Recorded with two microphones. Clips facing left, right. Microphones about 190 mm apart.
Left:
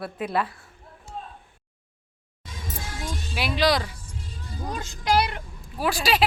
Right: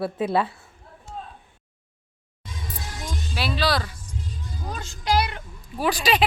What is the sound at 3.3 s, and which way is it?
Speech, 15° left (ahead or behind).